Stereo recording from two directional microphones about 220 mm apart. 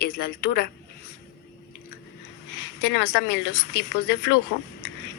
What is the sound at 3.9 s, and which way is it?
Speech, 50° left (ahead or behind).